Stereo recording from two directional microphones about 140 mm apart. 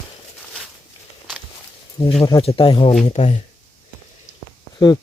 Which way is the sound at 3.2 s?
55° left (ahead or behind).